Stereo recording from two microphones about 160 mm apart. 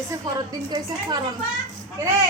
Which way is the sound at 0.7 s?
25° right (ahead or behind).